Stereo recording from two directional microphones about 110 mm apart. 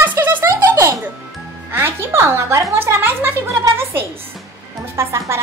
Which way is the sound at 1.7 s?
20° right (ahead or behind).